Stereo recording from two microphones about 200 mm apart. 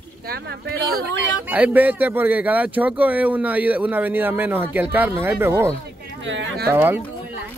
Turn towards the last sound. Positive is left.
turn(degrees=-10)  # may be behind; listen again after turning